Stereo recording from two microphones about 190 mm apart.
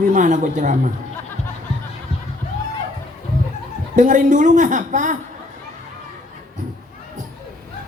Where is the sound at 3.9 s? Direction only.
40° right (ahead or behind).